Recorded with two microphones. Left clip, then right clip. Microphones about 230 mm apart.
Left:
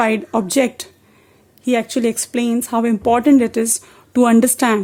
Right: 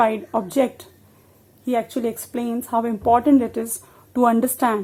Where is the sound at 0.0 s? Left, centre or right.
Left.